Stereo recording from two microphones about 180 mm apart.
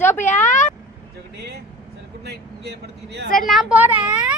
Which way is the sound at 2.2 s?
65° right (ahead or behind).